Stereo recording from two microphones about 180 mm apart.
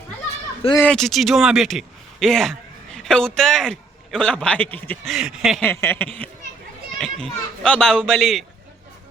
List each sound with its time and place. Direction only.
0.8 s speech: 5° left (ahead or behind)
5.1 s a child's voice: 5° right (ahead or behind)
5.6 s a sound: 15° left (ahead or behind)
7.0 s a child's voice: 5° left (ahead or behind)